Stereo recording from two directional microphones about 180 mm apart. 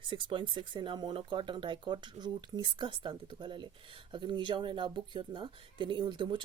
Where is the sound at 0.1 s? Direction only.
30° right (ahead or behind).